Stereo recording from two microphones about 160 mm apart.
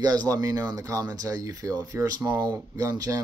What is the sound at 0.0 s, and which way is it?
Speech, 25° right (ahead or behind).